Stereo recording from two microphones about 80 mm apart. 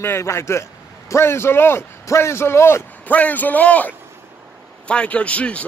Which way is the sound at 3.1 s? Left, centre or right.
Centre.